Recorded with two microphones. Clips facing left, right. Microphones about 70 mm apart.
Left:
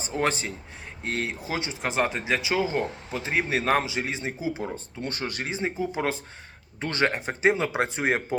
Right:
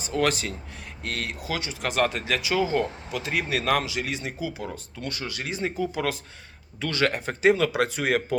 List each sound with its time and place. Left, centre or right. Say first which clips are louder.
0.0 s speech: right 2 dB; left
5.5 s speech: right 2 dB; left